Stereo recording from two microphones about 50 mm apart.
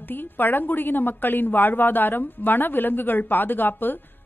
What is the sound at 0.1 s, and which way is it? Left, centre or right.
A woman's voice, left.